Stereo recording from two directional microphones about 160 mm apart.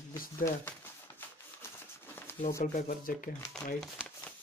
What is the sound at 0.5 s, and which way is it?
Crumpling, 15° left (ahead or behind).